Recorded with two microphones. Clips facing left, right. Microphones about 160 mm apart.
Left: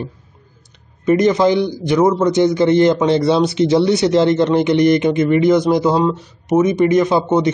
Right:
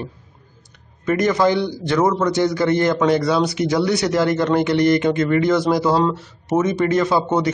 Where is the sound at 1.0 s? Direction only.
20° left (ahead or behind).